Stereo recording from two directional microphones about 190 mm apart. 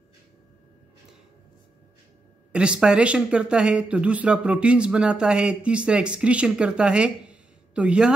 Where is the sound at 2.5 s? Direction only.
5° right (ahead or behind).